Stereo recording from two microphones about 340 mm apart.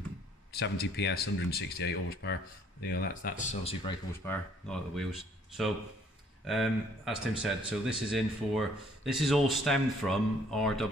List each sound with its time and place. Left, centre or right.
0.5 s speech: left; by 10.9 s centre